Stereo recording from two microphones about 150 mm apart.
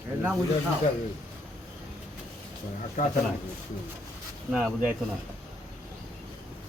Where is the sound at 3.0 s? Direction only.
55° left (ahead or behind).